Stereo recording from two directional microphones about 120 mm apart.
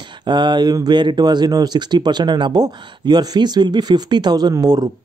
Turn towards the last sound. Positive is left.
turn(degrees=-30)  # may be behind; listen again after turning